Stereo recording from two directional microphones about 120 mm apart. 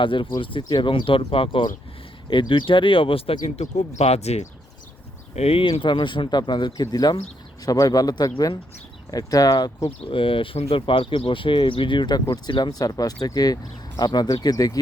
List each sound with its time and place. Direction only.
0.0 s speech: 45° left (ahead or behind)
3.6 s speech: 65° left (ahead or behind); by 9.9 s 30° left (ahead or behind)
10.1 s speech: 45° left (ahead or behind); by 14.8 s 30° left (ahead or behind)